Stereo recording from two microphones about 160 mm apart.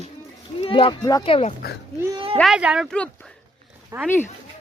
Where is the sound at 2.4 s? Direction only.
5° right (ahead or behind).